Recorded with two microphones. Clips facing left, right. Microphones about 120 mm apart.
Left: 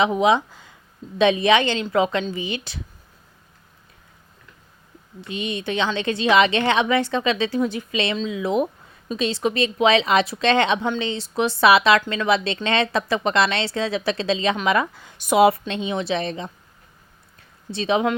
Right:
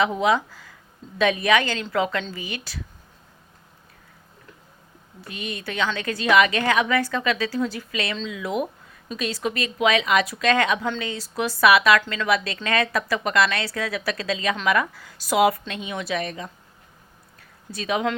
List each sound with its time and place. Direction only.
0.0 s a woman's voice: 20° left (ahead or behind)
5.2 s a woman's voice: 20° left (ahead or behind)
17.7 s a woman's voice: 25° left (ahead or behind)